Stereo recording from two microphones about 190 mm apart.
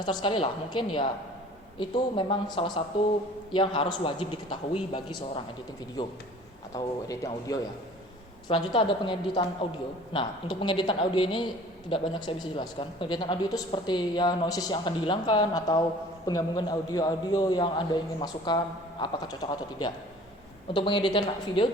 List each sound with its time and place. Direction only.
0.0 s a man's voice: 25° left (ahead or behind)
6.0 s a man's voice: 20° left (ahead or behind)